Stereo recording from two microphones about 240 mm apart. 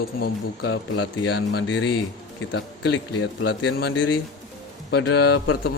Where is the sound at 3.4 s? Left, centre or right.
Left.